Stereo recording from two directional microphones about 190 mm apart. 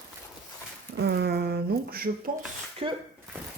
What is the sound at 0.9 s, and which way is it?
Speech, 60° right (ahead or behind).